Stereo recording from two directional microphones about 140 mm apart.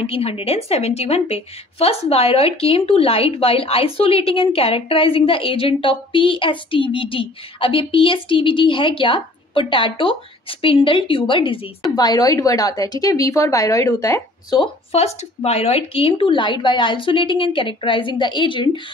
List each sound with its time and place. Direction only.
0.0 s a woman's voice: 45° left (ahead or behind); by 14.6 s 20° left (ahead or behind)
14.6 s a woman's voice: 45° left (ahead or behind)